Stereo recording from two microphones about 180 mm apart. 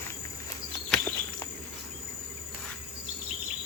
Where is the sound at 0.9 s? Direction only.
10° left (ahead or behind).